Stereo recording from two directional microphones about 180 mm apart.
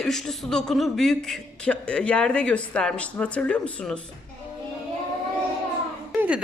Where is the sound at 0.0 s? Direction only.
Centre (ahead or behind).